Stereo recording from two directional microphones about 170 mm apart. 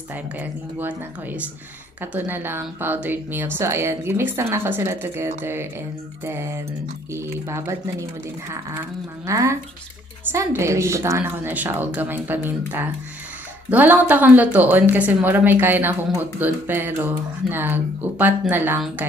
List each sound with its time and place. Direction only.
0.1 s a woman's voice: 10° right (ahead or behind)